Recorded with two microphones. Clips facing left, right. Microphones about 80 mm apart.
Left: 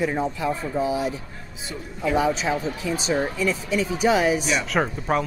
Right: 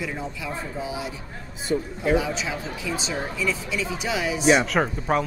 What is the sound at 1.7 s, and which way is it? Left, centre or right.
Speech, right.